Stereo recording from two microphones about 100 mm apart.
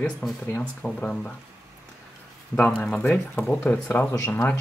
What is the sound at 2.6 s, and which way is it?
Speech, 10° left (ahead or behind).